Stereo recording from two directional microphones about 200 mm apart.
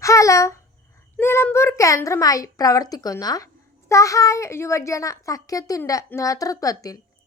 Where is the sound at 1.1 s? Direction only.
10° left (ahead or behind).